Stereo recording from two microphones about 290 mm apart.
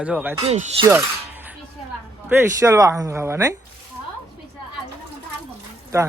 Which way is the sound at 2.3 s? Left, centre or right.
Centre.